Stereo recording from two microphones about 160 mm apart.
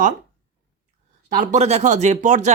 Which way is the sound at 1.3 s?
50° right (ahead or behind).